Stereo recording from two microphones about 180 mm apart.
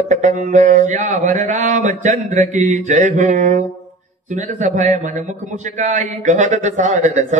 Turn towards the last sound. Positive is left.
turn(degrees=-45)  # may be behind; listen again after turning